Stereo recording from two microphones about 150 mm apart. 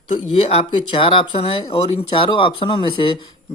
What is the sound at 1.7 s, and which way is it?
Speech, 40° left (ahead or behind).